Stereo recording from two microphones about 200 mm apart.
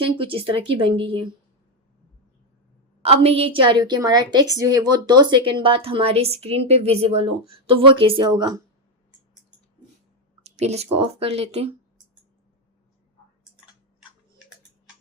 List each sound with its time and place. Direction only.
0.0 s a woman's voice: 25° right (ahead or behind)
3.1 s a woman's voice: 30° right (ahead or behind)
10.4 s speech: 35° right (ahead or behind)